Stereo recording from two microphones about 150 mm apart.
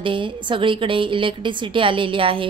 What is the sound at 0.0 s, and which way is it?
A woman's voice, 35° right (ahead or behind).